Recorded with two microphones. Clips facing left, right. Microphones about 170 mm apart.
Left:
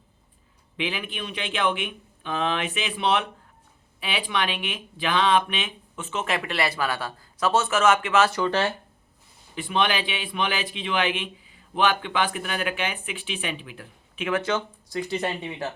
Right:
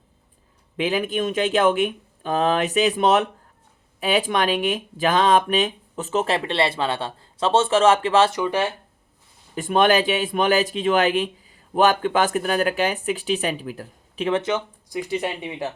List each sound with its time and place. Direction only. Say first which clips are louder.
0.8 s a man's voice: right 8 dB; 40° right (ahead or behind)
8.3 s speech: right 1 dB; 15° right (ahead or behind)
9.6 s a man's voice: right 7 dB; 45° right (ahead or behind)
14.4 s speech: right 2 dB; 15° right (ahead or behind)